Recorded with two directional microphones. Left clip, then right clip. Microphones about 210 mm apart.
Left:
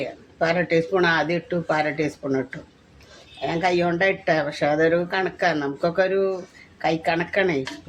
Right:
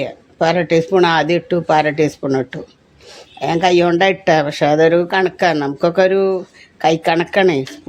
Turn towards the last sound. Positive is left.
turn(degrees=-40)  # may be behind; listen again after turning